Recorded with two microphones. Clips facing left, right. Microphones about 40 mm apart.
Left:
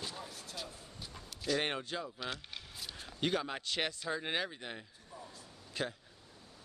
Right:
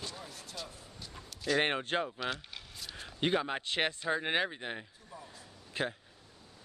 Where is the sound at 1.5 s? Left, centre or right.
Right.